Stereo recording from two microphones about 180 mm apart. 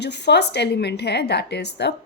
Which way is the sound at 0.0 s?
70° left (ahead or behind).